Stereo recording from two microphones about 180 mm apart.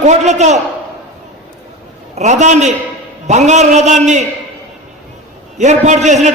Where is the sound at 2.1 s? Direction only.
40° right (ahead or behind).